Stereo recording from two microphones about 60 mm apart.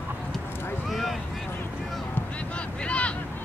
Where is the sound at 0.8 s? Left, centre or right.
Centre.